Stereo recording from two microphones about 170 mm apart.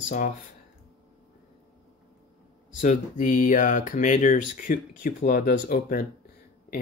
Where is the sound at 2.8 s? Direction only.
50° left (ahead or behind).